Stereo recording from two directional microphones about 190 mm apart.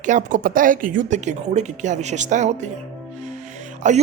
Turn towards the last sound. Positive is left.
turn(degrees=-40)  # may be behind; listen again after turning